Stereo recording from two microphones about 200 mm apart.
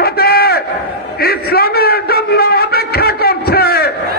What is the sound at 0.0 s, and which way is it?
Battle cry, 50° left (ahead or behind).